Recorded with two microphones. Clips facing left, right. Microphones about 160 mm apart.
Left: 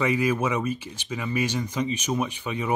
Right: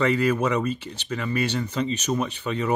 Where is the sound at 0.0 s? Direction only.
10° left (ahead or behind).